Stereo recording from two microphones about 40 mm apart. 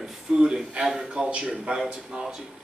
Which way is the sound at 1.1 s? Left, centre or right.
Right.